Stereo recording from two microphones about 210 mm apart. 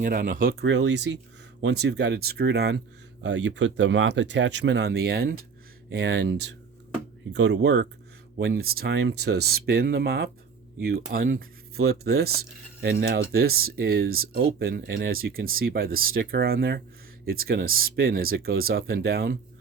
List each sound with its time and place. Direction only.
0.0 s speech: 40° right (ahead or behind)
0.6 s speech: 55° right (ahead or behind)